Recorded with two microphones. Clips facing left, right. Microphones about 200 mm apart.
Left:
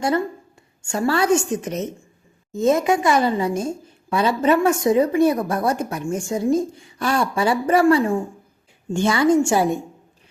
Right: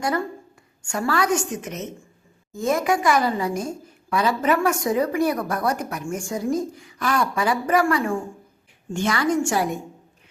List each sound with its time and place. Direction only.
0.0 s a woman's voice: 25° left (ahead or behind)